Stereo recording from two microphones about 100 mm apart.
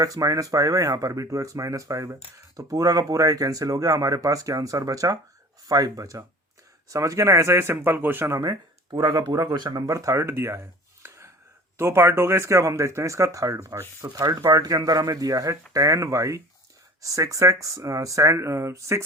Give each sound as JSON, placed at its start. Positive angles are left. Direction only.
{"t": 0.0, "sound": "speech", "side_deg": -35}
{"t": 8.9, "sound": "speech", "side_deg": -45}